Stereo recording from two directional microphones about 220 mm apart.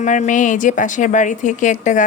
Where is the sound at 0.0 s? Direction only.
35° left (ahead or behind).